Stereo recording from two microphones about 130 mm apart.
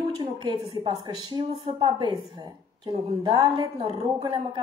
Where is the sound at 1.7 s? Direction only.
45° right (ahead or behind).